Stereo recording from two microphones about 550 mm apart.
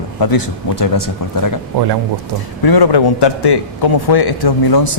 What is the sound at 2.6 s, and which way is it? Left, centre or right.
A man's voice, left.